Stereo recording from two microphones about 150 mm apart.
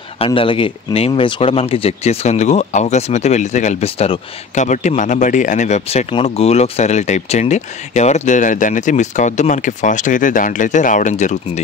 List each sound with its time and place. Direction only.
0.2 s speech: 35° left (ahead or behind); by 11.6 s 55° left (ahead or behind)